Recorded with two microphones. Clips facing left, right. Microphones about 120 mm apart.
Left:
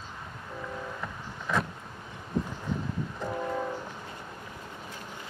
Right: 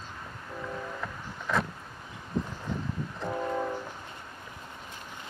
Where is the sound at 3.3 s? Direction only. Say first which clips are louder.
Right 2 dB; 5° right (ahead or behind).